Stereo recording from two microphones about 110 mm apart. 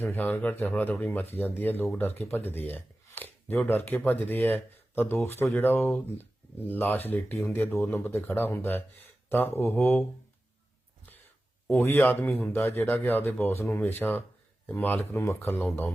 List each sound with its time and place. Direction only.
0.0 s speech: 15° left (ahead or behind)
11.8 s speech: 20° left (ahead or behind)